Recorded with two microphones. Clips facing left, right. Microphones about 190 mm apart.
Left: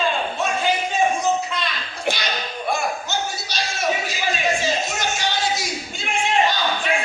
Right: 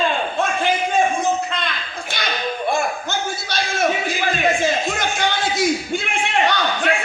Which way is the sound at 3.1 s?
55° right (ahead or behind).